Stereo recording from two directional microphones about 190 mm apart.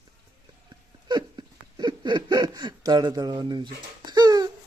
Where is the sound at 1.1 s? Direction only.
25° right (ahead or behind).